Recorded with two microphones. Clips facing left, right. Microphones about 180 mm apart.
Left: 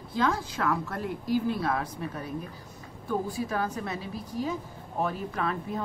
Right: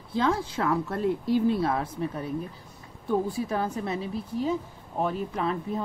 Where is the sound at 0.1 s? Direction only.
25° right (ahead or behind).